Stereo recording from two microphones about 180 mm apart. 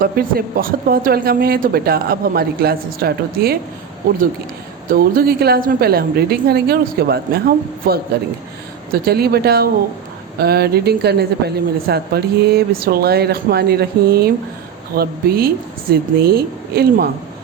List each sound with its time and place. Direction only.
0.0 s speech: 55° right (ahead or behind)
4.9 s speech: 55° right (ahead or behind)